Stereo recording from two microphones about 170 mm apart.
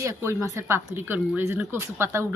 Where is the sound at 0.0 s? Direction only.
15° right (ahead or behind).